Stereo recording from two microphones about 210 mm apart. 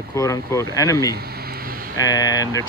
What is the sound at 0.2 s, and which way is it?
Speech, 15° left (ahead or behind).